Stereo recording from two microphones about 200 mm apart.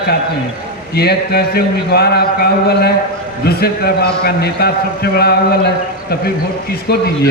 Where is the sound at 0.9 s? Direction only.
55° left (ahead or behind).